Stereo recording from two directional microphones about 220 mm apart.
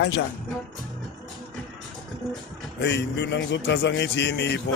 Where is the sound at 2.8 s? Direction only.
50° left (ahead or behind).